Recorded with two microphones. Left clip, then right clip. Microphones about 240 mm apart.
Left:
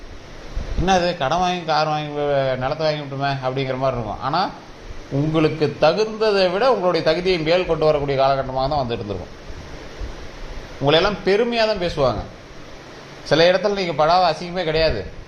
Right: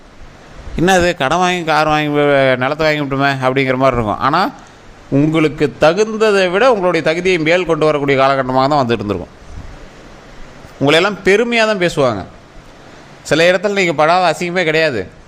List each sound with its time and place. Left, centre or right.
0.9 s a man's voice: right
10.8 s speech: right
13.2 s speech: right